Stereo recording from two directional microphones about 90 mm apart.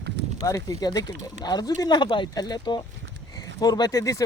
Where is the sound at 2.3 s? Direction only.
50° left (ahead or behind).